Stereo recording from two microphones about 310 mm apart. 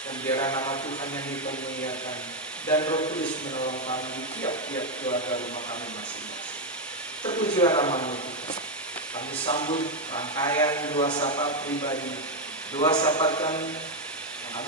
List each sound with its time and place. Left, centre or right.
0.3 s a man's voice: centre
2.8 s a man's voice: centre
7.2 s a man's voice: centre
9.4 s a man's voice: centre